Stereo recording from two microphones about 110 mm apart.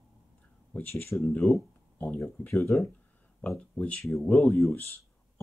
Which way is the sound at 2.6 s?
Centre (ahead or behind).